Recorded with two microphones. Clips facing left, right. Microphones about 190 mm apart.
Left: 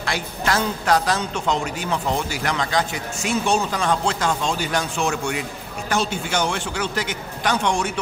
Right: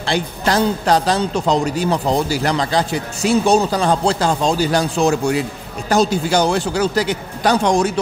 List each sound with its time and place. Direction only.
0.0 s a man's voice: 30° right (ahead or behind)